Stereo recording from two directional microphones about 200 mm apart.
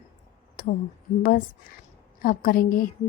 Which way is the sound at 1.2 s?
45° left (ahead or behind).